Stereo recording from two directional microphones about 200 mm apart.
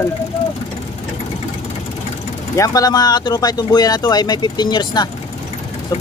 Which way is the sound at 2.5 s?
15° left (ahead or behind).